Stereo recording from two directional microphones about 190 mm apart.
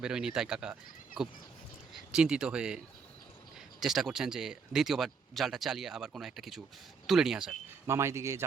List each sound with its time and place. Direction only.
0.0 s speech: 5° right (ahead or behind)
7.9 s speech: 15° right (ahead or behind)